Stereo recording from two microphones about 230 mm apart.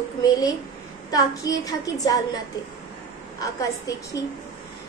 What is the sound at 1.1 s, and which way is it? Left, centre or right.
Speech, centre.